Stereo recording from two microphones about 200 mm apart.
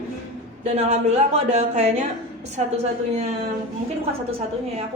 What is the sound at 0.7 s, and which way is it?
A woman's voice, 30° right (ahead or behind).